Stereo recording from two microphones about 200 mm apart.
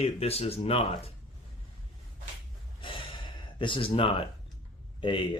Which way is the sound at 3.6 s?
25° left (ahead or behind).